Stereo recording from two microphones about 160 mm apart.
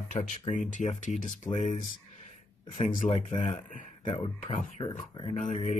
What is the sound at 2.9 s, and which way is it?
Speech, 50° left (ahead or behind).